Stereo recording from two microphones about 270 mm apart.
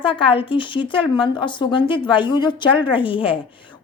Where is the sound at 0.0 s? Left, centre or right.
Centre.